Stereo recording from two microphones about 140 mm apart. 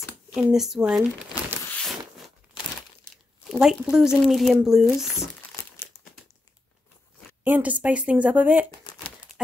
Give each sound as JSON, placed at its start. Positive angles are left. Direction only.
{"t": 0.3, "sound": "speech", "side_deg": 0}
{"t": 1.8, "sound": "zipper", "side_deg": 0}
{"t": 3.6, "sound": "speech", "side_deg": -5}
{"t": 5.9, "sound": "crumpling", "side_deg": 15}
{"t": 7.4, "sound": "a woman's voice", "side_deg": -10}